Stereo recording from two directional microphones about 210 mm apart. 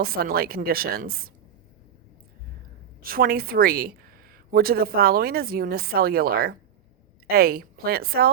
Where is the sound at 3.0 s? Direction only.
45° right (ahead or behind).